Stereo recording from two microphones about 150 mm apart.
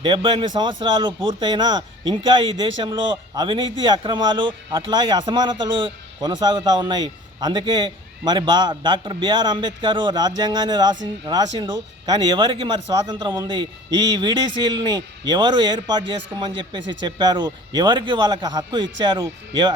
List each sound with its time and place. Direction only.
0.0 s speech: 30° right (ahead or behind)